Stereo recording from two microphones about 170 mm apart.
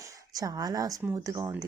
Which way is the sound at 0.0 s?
20° right (ahead or behind).